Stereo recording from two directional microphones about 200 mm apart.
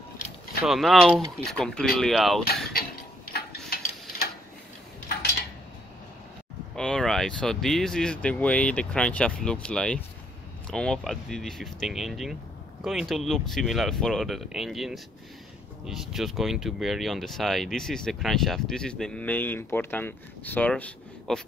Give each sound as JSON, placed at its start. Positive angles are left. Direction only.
{"t": 0.7, "sound": "speech", "side_deg": 0}
{"t": 3.3, "sound": "mechanisms", "side_deg": 50}
{"t": 6.7, "sound": "speech", "side_deg": 5}